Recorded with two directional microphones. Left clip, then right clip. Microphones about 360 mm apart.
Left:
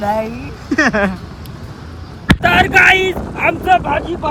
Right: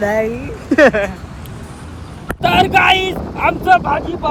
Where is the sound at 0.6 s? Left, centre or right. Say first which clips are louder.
Right 5 dB; centre.